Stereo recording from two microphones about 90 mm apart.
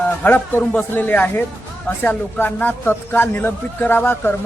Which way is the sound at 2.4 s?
20° left (ahead or behind).